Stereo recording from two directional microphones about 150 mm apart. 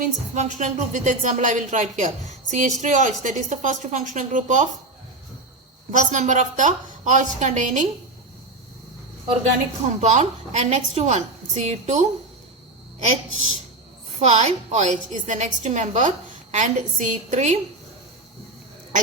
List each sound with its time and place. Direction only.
0.0 s a woman's voice: 55° right (ahead or behind)
5.9 s a woman's voice: 55° right (ahead or behind)
9.2 s a woman's voice: 40° right (ahead or behind)
10.0 s a woman's voice: 50° right (ahead or behind)
14.2 s a woman's voice: 50° right (ahead or behind)